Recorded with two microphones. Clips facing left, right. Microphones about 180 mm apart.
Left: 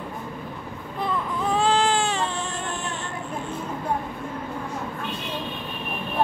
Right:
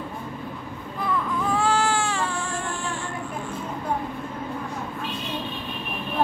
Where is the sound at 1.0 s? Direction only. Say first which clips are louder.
Right 1 dB; 20° left (ahead or behind).